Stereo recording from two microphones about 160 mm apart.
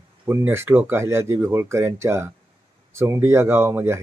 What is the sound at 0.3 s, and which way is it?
Speech, 15° right (ahead or behind).